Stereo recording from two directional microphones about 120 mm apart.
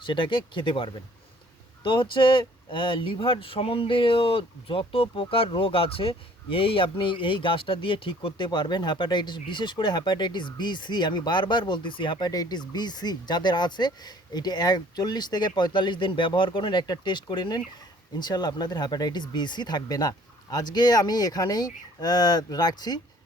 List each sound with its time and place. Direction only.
0.0 s speech: 45° left (ahead or behind)